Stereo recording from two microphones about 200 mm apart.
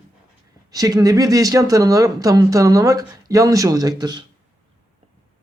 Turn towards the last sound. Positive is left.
turn(degrees=-20)  # may be behind; listen again after turning